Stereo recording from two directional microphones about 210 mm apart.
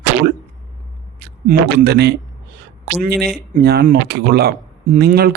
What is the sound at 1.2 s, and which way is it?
Speech, 50° right (ahead or behind).